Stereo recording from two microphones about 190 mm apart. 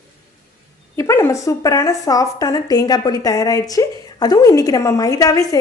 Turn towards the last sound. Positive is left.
turn(degrees=20)  # may be behind; listen again after turning